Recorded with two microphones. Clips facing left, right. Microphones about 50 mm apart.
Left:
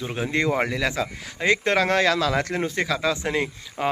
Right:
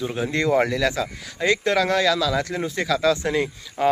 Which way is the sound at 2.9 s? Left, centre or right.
Left.